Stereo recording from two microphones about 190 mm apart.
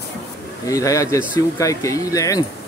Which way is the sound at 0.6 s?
15° left (ahead or behind).